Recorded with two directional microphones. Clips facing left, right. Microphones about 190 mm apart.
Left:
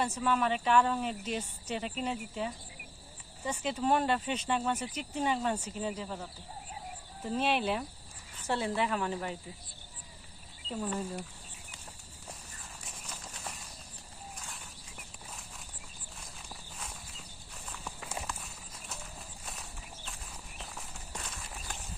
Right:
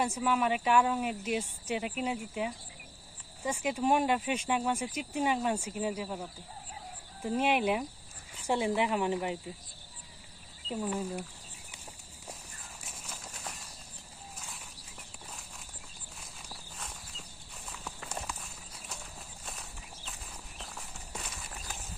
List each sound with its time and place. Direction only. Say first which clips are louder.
0.0 s speech: right 1 dB; 10° right (ahead or behind)
10.7 s speech: right 2 dB; 5° right (ahead or behind)
12.8 s a sound: even; 5° right (ahead or behind)
16.5 s walk: even; centre (ahead or behind)
17.7 s clip-clop: even; centre (ahead or behind)
20.6 s a sound: even; centre (ahead or behind)